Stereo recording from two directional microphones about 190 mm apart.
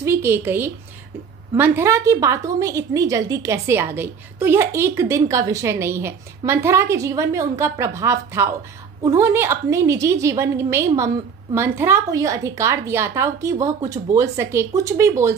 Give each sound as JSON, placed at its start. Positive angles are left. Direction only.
{"t": 0.0, "sound": "a woman's voice", "side_deg": -15}